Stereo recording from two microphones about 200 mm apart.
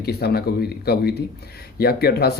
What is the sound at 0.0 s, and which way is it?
Speech, 50° left (ahead or behind).